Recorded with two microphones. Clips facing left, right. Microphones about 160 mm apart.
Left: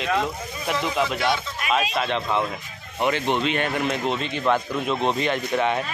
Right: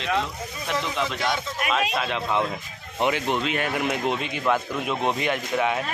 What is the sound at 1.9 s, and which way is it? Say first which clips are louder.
A man's voice: left 1 dB; centre (ahead or behind).